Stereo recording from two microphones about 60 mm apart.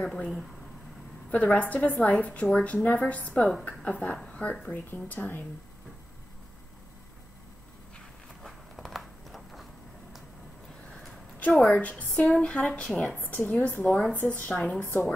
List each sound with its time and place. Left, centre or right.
0.0 s speech: centre
1.3 s a woman's voice: left
8.4 s a sound: centre
11.3 s a sound: left
11.7 s a woman's voice: left
14.5 s a woman's voice: centre
14.8 s a woman's voice: left